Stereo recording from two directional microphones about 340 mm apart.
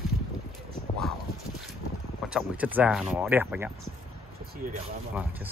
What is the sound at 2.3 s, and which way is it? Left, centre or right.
Speech, centre.